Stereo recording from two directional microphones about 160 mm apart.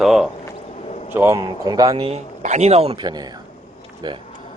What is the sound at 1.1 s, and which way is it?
Speech, 15° right (ahead or behind).